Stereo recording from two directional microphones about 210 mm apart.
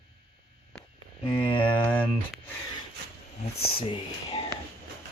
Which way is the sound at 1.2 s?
25° left (ahead or behind).